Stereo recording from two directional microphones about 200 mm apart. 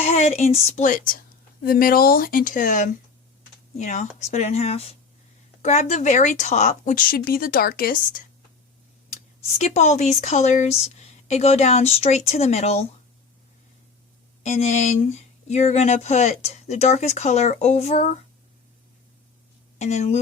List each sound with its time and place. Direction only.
0.0 s speech: 35° left (ahead or behind)
9.6 s speech: 35° left (ahead or behind)
14.4 s speech: 35° left (ahead or behind)
19.8 s speech: 35° left (ahead or behind)